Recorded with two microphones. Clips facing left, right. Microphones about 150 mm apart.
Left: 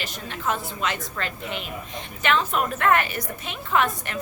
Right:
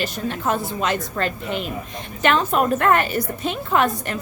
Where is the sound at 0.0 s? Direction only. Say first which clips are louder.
Right 6 dB; 40° right (ahead or behind).